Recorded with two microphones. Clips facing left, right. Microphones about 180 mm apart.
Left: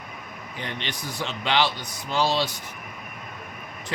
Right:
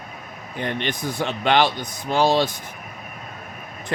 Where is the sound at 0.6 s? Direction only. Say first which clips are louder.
Right 8 dB; 50° right (ahead or behind).